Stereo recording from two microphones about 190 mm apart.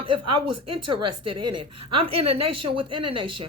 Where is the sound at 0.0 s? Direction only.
25° right (ahead or behind).